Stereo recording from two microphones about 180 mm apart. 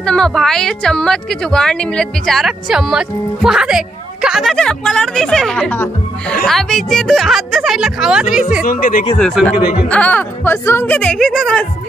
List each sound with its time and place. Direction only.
0.0 s a woman's voice: 5° left (ahead or behind)
8.6 s speech: 50° left (ahead or behind)
9.2 s a woman's voice: centre (ahead or behind)
9.8 s speech: 10° left (ahead or behind)